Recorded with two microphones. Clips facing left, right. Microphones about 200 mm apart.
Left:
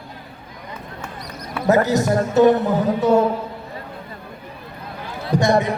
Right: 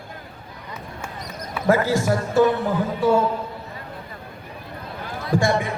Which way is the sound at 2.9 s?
20° left (ahead or behind).